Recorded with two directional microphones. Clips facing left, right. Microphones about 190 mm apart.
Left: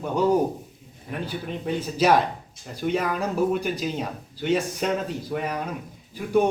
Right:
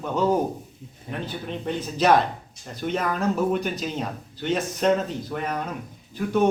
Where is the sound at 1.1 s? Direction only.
25° right (ahead or behind).